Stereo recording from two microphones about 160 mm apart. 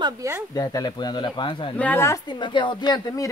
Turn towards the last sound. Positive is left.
turn(degrees=25)  # may be behind; listen again after turning